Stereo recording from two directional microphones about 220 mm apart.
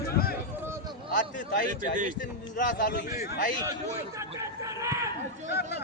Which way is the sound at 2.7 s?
50° left (ahead or behind).